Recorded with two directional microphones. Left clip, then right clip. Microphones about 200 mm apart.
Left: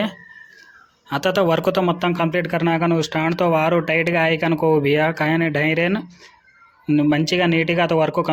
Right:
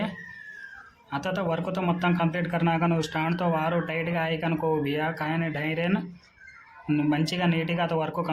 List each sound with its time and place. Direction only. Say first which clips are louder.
1.1 s a man's voice: left 11 dB; 35° left (ahead or behind)